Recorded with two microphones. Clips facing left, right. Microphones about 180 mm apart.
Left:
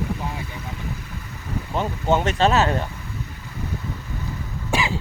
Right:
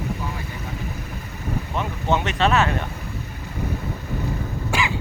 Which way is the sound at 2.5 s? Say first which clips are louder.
Even; 30° left (ahead or behind).